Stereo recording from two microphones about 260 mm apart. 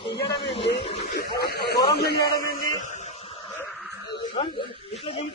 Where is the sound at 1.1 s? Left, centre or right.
Left.